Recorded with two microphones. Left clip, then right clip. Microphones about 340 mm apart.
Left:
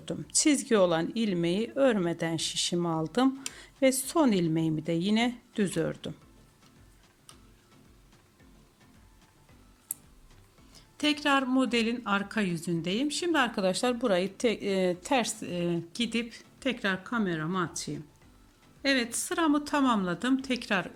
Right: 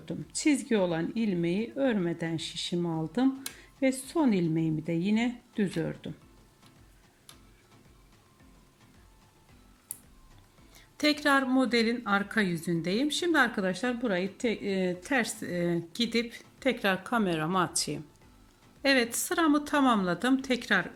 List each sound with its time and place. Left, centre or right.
0.3 s speech: centre
2.7 s speech: left
3.1 s speech: centre
10.8 s speech: centre